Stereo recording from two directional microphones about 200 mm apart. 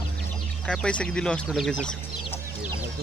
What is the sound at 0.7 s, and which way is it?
Speech, 5° left (ahead or behind).